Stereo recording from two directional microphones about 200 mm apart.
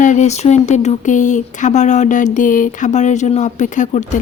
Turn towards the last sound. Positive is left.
turn(degrees=40)  # may be behind; listen again after turning